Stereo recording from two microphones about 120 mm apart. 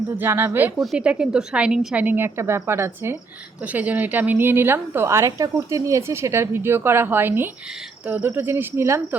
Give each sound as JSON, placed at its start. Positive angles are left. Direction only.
{"t": 0.2, "sound": "a woman's voice", "side_deg": -20}
{"t": 0.8, "sound": "a woman's voice", "side_deg": -5}